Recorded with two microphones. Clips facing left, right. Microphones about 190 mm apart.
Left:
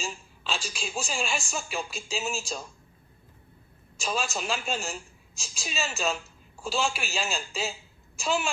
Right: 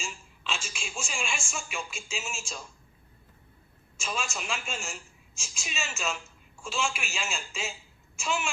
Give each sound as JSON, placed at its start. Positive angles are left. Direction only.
{"t": 0.0, "sound": "a woman's voice", "side_deg": 35}
{"t": 3.9, "sound": "a woman's voice", "side_deg": 35}